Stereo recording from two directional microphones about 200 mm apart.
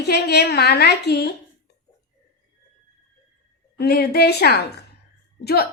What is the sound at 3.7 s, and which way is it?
A woman's voice, 55° left (ahead or behind).